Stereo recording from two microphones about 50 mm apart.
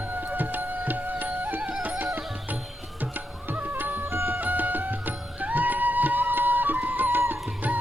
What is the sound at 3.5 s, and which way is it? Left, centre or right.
Music, right.